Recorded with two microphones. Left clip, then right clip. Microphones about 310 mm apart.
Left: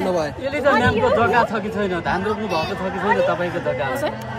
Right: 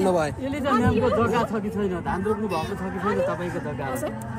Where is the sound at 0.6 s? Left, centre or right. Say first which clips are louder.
Left 6 dB; left.